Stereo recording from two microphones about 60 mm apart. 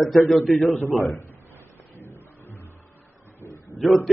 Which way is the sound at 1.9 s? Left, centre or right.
Left.